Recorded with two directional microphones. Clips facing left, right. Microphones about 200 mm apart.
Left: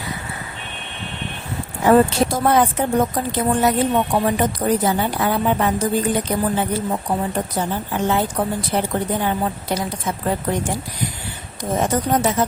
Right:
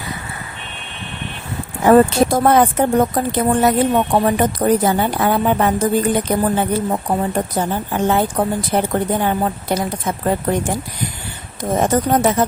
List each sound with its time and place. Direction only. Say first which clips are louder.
1.8 s a woman's voice: right 3 dB; 55° right (ahead or behind)
11.8 s a woman's voice: right 4 dB; 55° right (ahead or behind)